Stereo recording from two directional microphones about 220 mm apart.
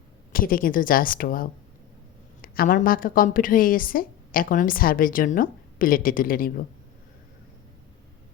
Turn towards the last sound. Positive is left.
turn(degrees=40)  # may be behind; listen again after turning